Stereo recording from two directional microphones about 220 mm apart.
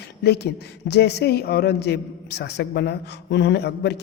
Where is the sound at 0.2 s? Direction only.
50° left (ahead or behind).